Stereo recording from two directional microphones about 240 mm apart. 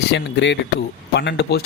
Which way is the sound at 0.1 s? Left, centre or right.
Left.